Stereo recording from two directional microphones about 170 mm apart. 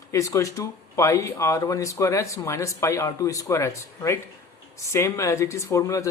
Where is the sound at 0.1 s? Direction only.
20° left (ahead or behind).